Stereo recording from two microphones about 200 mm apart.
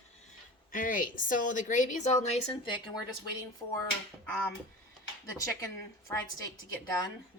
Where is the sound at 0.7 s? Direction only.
45° left (ahead or behind); by 3.1 s 20° left (ahead or behind).